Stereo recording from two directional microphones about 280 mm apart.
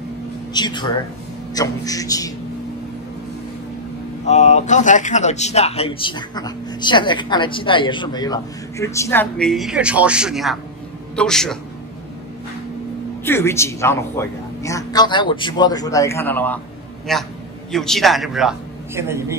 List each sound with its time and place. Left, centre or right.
0.5 s a man's voice: centre
4.3 s a man's voice: left; by 11.5 s centre
13.2 s a man's voice: centre